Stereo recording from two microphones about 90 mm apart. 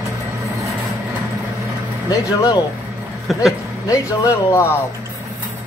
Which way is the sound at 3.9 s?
35° left (ahead or behind).